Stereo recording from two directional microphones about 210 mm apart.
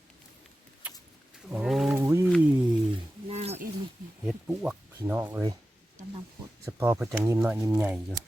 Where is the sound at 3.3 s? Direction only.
30° right (ahead or behind).